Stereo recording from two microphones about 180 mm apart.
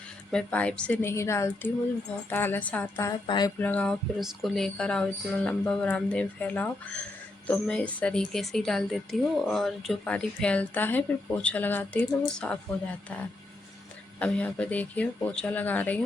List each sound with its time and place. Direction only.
0.3 s speech: 5° left (ahead or behind)
3.2 s a sound: 25° left (ahead or behind)
3.6 s a woman's voice: 10° left (ahead or behind)